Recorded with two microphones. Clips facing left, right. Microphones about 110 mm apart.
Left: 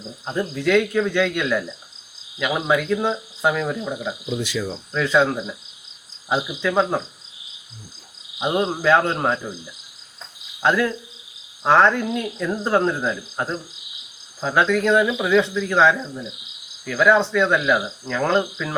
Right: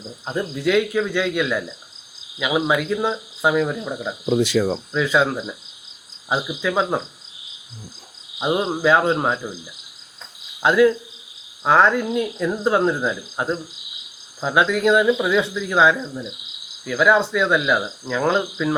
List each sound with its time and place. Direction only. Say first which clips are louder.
0.3 s speech: even; 5° right (ahead or behind)
4.3 s speech: right 9 dB; 35° right (ahead or behind)
4.9 s speech: even; 5° right (ahead or behind)
8.4 s speech: right 1 dB; 5° right (ahead or behind)
10.6 s speech: right 5 dB; 5° right (ahead or behind)